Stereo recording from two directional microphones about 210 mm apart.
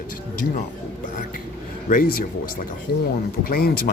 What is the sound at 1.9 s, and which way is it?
Speech, 40° left (ahead or behind).